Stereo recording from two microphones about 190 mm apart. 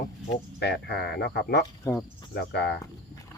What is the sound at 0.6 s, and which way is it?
Cricket, 60° left (ahead or behind).